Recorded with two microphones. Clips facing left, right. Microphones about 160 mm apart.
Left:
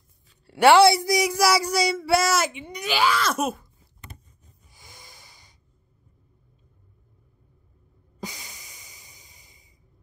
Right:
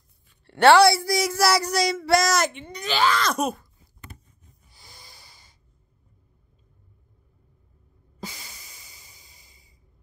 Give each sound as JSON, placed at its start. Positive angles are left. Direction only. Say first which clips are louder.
{"t": 0.5, "sound": "a sound", "louder": "right 1 dB", "side_deg": 10}
{"t": 0.7, "sound": "speech", "louder": "left 1 dB", "side_deg": 20}
{"t": 4.7, "sound": "snort", "louder": "left 1 dB", "side_deg": 15}
{"t": 8.2, "sound": "snort", "louder": "left 1 dB", "side_deg": 15}